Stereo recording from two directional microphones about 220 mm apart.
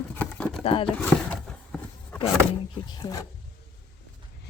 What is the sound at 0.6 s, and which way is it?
Speech, 25° left (ahead or behind).